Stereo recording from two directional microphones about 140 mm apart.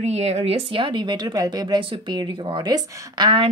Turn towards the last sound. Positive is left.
turn(degrees=-35)  # may be behind; listen again after turning